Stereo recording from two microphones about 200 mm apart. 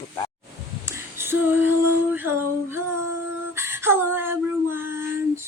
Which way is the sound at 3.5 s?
10° right (ahead or behind).